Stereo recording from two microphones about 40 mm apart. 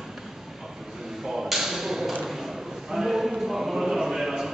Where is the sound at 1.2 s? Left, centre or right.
Centre.